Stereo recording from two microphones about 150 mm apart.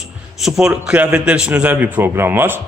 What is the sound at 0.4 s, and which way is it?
A man's voice, 5° right (ahead or behind).